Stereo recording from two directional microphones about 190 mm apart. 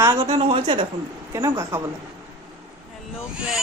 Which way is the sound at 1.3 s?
15° right (ahead or behind).